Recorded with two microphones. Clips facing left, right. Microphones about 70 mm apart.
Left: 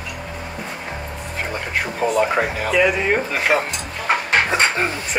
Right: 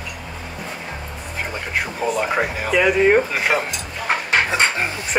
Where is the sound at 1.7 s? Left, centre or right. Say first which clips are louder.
Left 2 dB; centre.